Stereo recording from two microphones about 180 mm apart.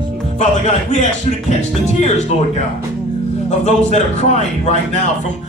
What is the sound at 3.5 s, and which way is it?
A man's voice, 40° left (ahead or behind).